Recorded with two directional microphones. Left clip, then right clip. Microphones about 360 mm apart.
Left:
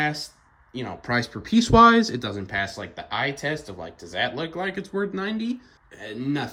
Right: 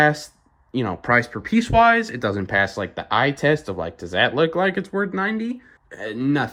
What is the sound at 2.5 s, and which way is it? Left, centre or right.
Speech, right.